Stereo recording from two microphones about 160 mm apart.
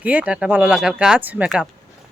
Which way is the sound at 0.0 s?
10° right (ahead or behind).